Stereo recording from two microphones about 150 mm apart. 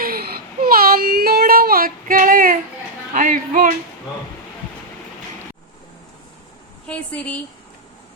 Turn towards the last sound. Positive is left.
turn(degrees=10)  # may be behind; listen again after turning